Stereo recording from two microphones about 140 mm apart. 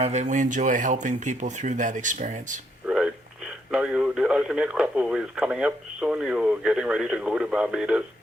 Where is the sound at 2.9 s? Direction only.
5° right (ahead or behind).